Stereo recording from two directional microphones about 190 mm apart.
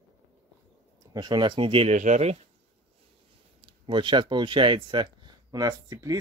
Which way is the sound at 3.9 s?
25° right (ahead or behind).